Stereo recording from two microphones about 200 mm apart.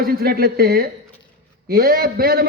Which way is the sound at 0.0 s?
50° right (ahead or behind).